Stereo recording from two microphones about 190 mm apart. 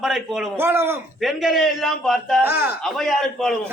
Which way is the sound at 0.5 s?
10° right (ahead or behind).